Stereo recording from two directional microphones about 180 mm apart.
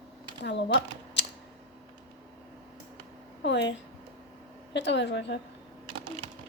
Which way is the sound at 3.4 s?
75° left (ahead or behind).